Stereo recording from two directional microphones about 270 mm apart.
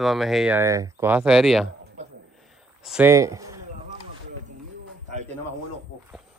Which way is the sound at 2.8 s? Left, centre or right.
Centre.